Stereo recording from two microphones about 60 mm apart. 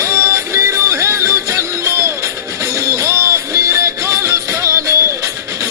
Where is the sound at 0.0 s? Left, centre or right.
Right.